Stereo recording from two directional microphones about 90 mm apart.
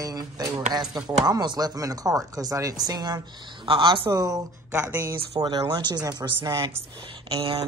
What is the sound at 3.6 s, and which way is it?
Speech, 70° right (ahead or behind).